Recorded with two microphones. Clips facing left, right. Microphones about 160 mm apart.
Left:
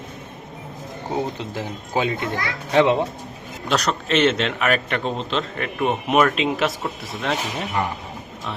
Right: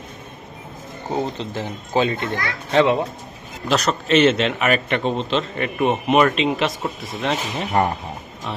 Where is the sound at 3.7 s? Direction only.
Centre (ahead or behind).